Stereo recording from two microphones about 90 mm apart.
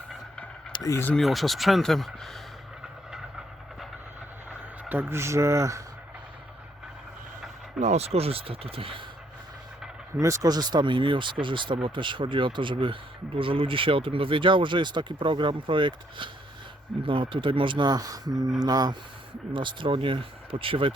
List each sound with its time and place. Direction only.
0.7 s a sound: 60° left (ahead or behind)
1.1 s speech: centre (ahead or behind)
4.9 s speech: 25° right (ahead or behind)
7.8 s speech: 5° right (ahead or behind)
8.2 s speech: 90° right
10.2 s speech: 35° right (ahead or behind)
10.5 s speech: 50° right (ahead or behind)
19.5 s speech: 65° right (ahead or behind)